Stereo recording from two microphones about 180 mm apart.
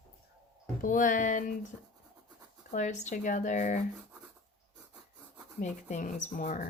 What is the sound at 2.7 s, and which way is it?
Speech, 40° left (ahead or behind).